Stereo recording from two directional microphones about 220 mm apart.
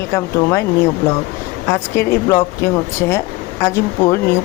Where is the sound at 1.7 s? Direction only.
10° left (ahead or behind).